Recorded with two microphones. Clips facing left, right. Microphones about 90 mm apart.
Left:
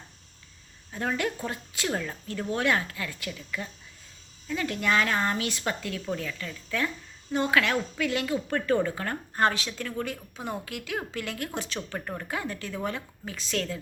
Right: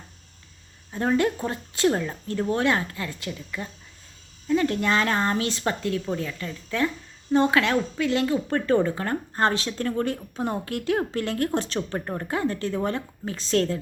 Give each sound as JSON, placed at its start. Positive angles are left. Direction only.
{"t": 0.9, "sound": "speech", "side_deg": -30}
{"t": 11.9, "sound": "speech", "side_deg": -25}